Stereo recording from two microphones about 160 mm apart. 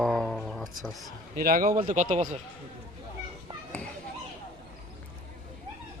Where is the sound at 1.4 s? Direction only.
65° right (ahead or behind).